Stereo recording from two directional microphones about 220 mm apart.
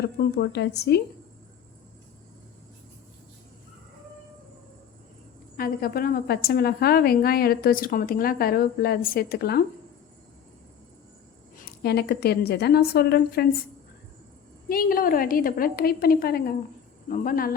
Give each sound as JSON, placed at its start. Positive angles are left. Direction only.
{"t": 0.2, "sound": "a woman's voice", "side_deg": 50}
{"t": 5.5, "sound": "a woman's voice", "side_deg": 40}
{"t": 11.5, "sound": "a woman's voice", "side_deg": 45}
{"t": 14.7, "sound": "a woman's voice", "side_deg": 40}